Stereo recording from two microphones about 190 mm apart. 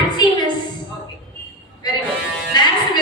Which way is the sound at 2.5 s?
20° left (ahead or behind).